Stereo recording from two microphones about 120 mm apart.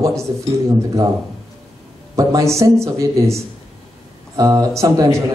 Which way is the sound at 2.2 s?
25° right (ahead or behind).